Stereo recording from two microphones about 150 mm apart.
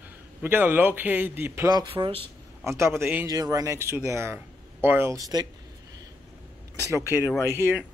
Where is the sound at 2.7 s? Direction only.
20° right (ahead or behind).